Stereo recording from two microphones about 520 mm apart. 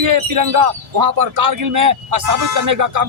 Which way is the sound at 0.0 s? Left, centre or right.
Right.